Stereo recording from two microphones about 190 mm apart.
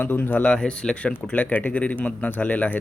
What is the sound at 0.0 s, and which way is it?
A man's voice, 10° left (ahead or behind).